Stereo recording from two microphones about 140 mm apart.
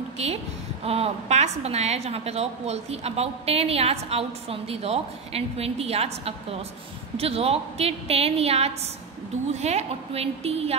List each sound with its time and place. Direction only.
0.8 s a woman's voice: 45° right (ahead or behind)